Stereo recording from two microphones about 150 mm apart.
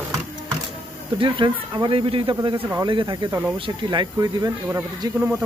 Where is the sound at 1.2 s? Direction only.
30° right (ahead or behind).